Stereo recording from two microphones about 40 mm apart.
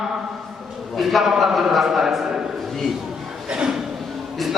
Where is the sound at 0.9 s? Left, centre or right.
Centre.